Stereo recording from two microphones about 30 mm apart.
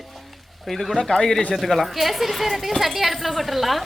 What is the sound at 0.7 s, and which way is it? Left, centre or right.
Speech, centre.